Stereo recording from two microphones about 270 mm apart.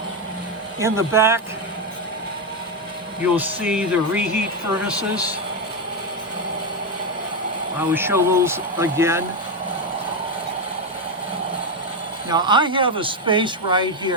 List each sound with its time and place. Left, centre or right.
0.8 s speech: centre
3.3 s speech: centre
7.9 s speech: centre
12.3 s speech: centre